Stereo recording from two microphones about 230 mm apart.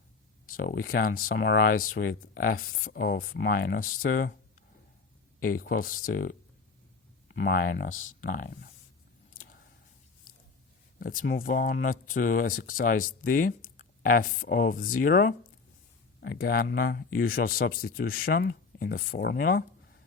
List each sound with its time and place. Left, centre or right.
0.4 s speech: left
5.4 s speech: left
11.0 s speech: left